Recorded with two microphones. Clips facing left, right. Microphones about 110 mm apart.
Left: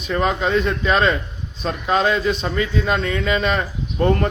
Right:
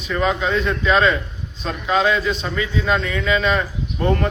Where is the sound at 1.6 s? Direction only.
45° left (ahead or behind).